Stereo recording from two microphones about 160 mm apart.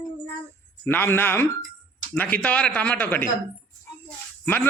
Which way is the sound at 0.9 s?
15° left (ahead or behind).